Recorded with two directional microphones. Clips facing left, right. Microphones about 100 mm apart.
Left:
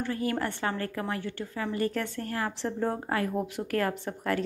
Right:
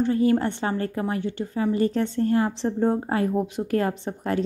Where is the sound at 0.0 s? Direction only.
25° right (ahead or behind).